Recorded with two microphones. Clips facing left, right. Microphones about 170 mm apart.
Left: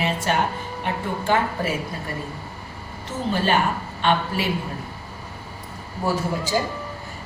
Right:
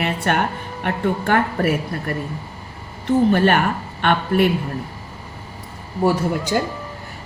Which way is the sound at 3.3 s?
60° right (ahead or behind).